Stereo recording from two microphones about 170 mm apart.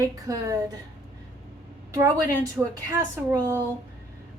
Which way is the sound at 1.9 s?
20° right (ahead or behind).